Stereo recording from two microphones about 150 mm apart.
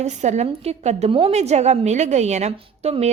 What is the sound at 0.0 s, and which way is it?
A woman's voice, 50° right (ahead or behind).